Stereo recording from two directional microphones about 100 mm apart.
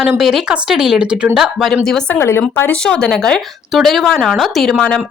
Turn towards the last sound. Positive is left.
turn(degrees=5)  # may be behind; listen again after turning